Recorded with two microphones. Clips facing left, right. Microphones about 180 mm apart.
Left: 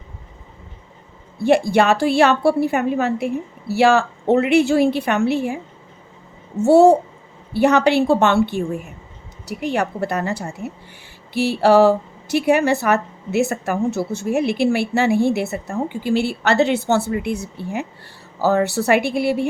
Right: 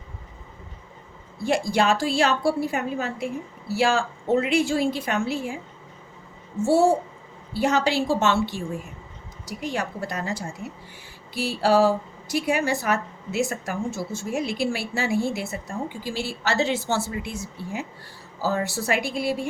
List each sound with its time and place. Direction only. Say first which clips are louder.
1.4 s speech: left 7 dB; 65° left (ahead or behind)
6.6 s speech: left 8 dB; 65° left (ahead or behind)